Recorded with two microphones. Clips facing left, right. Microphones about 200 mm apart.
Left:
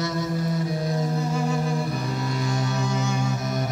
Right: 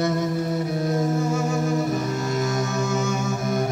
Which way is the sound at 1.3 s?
45° right (ahead or behind).